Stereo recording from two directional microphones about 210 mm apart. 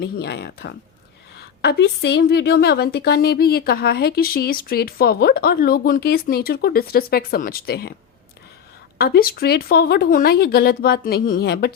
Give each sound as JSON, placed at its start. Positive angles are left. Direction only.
{"t": 0.0, "sound": "a woman's voice", "side_deg": 50}
{"t": 9.0, "sound": "a woman's voice", "side_deg": 45}